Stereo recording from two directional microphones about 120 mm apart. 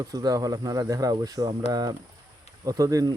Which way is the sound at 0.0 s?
30° right (ahead or behind).